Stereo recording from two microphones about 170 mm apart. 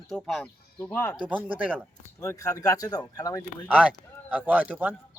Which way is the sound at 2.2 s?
15° left (ahead or behind).